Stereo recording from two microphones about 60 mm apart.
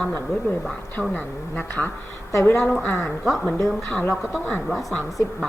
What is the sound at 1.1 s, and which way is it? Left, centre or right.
Speech, left.